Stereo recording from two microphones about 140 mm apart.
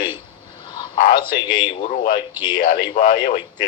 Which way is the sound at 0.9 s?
70° left (ahead or behind).